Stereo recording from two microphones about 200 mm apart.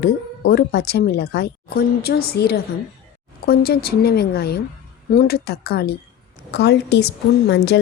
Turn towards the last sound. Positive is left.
turn(degrees=55)  # may be behind; listen again after turning